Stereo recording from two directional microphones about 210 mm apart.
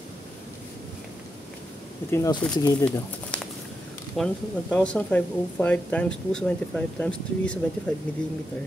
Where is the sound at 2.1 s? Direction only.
10° left (ahead or behind).